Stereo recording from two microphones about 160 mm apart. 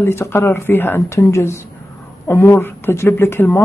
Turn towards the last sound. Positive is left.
turn(degrees=15)  # may be behind; listen again after turning